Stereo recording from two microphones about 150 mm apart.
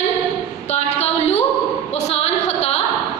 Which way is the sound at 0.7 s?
45° left (ahead or behind).